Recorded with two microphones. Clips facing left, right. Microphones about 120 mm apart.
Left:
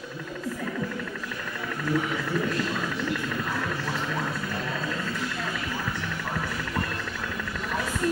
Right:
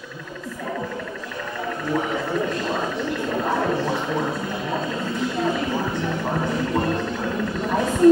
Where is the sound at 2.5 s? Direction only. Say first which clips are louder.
Right 4 dB; 30° right (ahead or behind).